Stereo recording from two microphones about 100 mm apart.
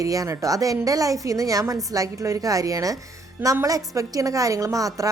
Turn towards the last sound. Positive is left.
turn(degrees=-35)  # may be behind; listen again after turning